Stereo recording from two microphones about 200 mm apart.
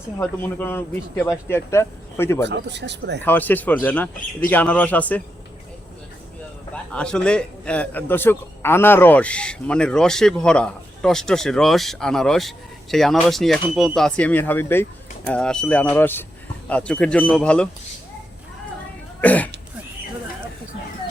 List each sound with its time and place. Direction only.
0.2 s speech: 10° left (ahead or behind)
2.5 s speech: 60° right (ahead or behind)
3.2 s speech: 10° left (ahead or behind)
6.9 s a man's voice: 5° left (ahead or behind)
19.2 s speech: 5° left (ahead or behind)